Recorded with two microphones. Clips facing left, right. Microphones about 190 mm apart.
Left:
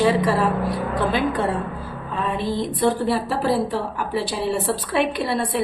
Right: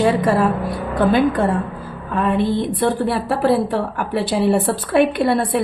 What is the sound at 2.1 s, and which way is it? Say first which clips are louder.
A woman's voice: right 6 dB; 60° right (ahead or behind).